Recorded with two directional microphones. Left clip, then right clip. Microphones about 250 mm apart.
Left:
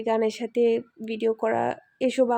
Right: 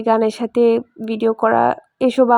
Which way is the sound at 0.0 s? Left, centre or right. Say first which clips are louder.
Right 8 dB; right.